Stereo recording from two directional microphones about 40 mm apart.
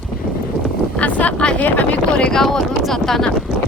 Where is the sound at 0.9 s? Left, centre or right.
Left.